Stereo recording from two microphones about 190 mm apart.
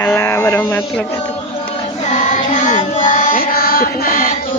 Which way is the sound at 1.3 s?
30° left (ahead or behind).